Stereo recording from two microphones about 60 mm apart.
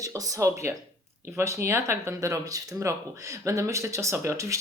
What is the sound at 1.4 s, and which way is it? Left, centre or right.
Speech, right.